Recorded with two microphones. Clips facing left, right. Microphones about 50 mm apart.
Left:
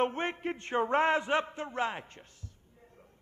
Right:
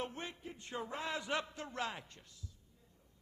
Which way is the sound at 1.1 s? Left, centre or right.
Left.